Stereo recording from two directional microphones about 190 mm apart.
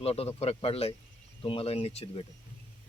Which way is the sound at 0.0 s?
30° left (ahead or behind).